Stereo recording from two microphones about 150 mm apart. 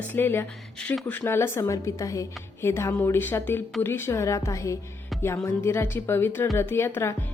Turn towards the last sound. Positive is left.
turn(degrees=15)  # may be behind; listen again after turning